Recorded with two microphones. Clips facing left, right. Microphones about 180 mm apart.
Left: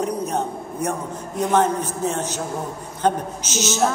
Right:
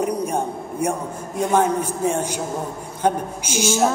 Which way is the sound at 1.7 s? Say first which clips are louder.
Right 3 dB; 10° right (ahead or behind).